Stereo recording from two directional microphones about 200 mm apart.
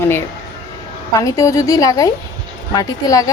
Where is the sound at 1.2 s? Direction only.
15° left (ahead or behind).